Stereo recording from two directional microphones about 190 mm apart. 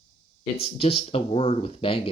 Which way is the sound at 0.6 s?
30° left (ahead or behind).